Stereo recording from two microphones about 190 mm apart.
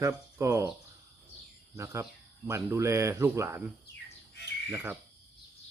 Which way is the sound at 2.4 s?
15° right (ahead or behind).